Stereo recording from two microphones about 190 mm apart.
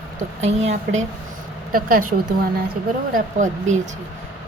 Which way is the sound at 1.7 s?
50° right (ahead or behind).